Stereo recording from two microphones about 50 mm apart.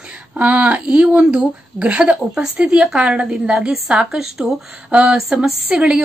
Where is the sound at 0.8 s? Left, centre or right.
Centre.